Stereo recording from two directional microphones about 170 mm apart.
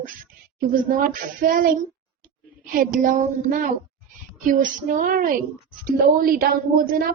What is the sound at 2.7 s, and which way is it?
Female singing, 55° right (ahead or behind).